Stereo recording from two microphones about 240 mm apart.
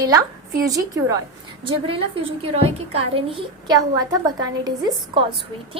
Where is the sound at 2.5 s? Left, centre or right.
Right.